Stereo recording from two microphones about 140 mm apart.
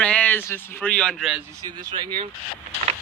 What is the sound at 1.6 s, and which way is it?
Speech, 30° right (ahead or behind).